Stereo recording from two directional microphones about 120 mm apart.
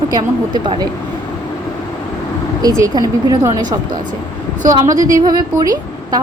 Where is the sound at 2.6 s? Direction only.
30° right (ahead or behind).